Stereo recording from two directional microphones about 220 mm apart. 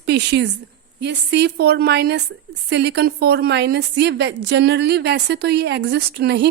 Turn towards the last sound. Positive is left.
turn(degrees=-50)  # may be behind; listen again after turning